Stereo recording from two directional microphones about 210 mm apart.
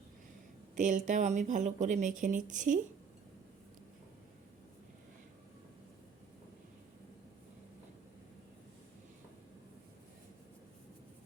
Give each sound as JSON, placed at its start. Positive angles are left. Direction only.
{"t": 0.8, "sound": "speech", "side_deg": -35}